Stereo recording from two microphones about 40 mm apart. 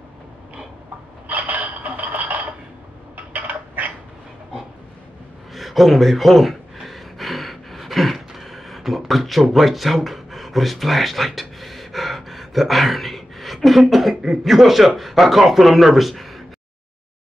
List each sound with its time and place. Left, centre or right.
1.2 s a sound: right
5.5 s gasp: centre
15.0 s speech: centre